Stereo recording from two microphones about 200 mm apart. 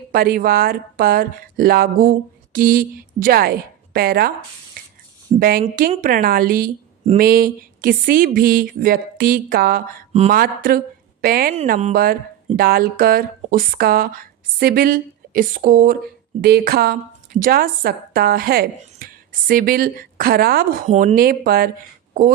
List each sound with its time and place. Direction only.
0.1 s speech: 45° right (ahead or behind)
5.4 s speech: 45° right (ahead or behind)
10.1 s speech: 30° right (ahead or behind)
10.3 s a woman's voice: 45° right (ahead or behind)